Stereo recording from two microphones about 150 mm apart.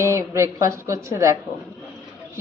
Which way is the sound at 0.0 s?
20° right (ahead or behind).